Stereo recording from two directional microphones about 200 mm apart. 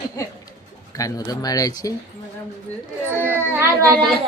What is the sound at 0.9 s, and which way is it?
Speech, 15° left (ahead or behind).